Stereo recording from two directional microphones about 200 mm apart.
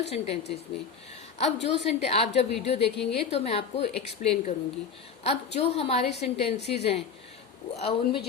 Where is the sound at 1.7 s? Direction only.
30° left (ahead or behind).